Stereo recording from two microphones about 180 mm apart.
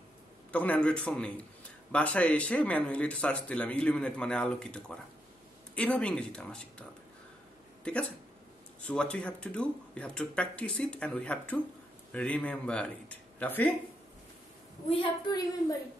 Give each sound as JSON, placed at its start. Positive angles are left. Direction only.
{"t": 0.5, "sound": "a man's voice", "side_deg": 10}
{"t": 8.8, "sound": "a man's voice", "side_deg": 5}
{"t": 14.9, "sound": "a woman's voice", "side_deg": 25}